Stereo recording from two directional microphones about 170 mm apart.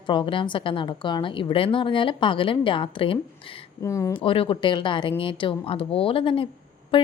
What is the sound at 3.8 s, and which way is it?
Speech, 20° left (ahead or behind).